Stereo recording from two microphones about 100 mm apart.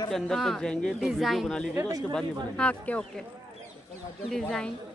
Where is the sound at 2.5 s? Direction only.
15° left (ahead or behind).